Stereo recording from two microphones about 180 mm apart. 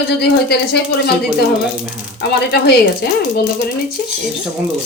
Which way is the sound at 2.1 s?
65° left (ahead or behind).